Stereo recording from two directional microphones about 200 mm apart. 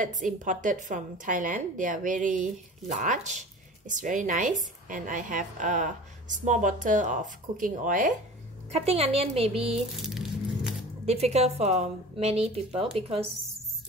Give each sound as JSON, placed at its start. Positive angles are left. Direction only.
{"t": 0.0, "sound": "speech", "side_deg": -40}
{"t": 8.7, "sound": "a woman's voice", "side_deg": -30}
{"t": 10.0, "sound": "a sound", "side_deg": 0}
{"t": 11.1, "sound": "speech", "side_deg": -30}